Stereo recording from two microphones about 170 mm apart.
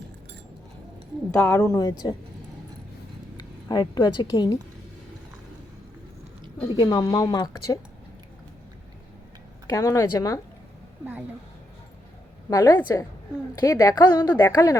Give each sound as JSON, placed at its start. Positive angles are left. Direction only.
{"t": 1.4, "sound": "a woman's voice", "side_deg": 15}
{"t": 3.7, "sound": "a woman's voice", "side_deg": 25}
{"t": 6.7, "sound": "a woman's voice", "side_deg": 25}
{"t": 9.6, "sound": "a woman's voice", "side_deg": 20}
{"t": 12.5, "sound": "a woman's voice", "side_deg": 20}